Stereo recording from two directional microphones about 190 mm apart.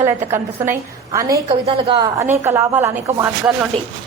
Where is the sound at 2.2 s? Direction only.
15° right (ahead or behind).